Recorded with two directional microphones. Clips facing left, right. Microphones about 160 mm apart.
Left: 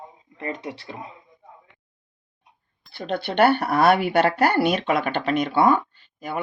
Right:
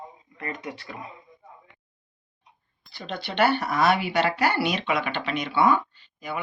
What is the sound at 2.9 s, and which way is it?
Speech, 55° left (ahead or behind).